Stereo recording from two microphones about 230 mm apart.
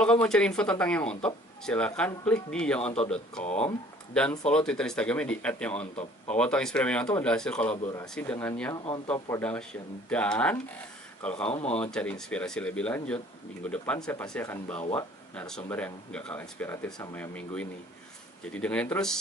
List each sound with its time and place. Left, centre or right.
0.0 s speech: centre
3.4 s speech: left
4.1 s speech: centre
8.7 s speech: left
9.1 s speech: centre